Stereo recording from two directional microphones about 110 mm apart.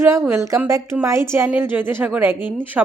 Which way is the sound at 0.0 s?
25° right (ahead or behind).